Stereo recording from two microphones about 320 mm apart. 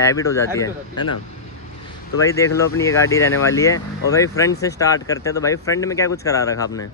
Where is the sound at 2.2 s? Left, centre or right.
Centre.